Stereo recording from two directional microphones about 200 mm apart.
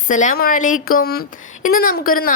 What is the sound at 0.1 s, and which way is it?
A woman's voice, 40° left (ahead or behind).